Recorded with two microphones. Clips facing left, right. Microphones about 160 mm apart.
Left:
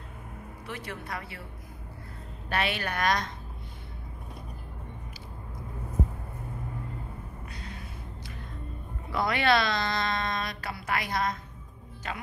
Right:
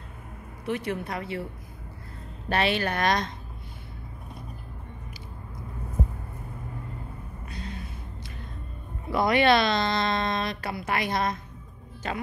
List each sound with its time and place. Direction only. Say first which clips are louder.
0.7 s speech: right 9 dB; 20° right (ahead or behind)
2.5 s speech: right 5 dB; 30° right (ahead or behind)
9.1 s speech: right 4 dB; 15° right (ahead or behind)